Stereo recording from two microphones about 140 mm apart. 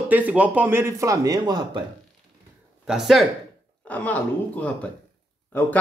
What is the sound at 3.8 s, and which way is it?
Speech, 10° left (ahead or behind).